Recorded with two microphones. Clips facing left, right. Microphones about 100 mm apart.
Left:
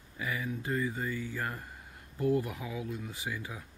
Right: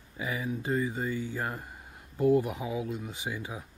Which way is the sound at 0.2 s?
20° right (ahead or behind).